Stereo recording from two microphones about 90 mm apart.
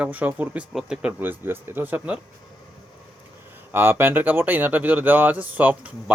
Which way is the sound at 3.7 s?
25° right (ahead or behind).